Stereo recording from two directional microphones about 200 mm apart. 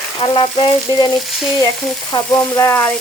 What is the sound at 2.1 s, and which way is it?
Speech, 15° left (ahead or behind).